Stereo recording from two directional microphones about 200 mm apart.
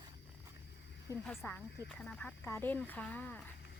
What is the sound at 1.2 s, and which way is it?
Speech, 5° left (ahead or behind).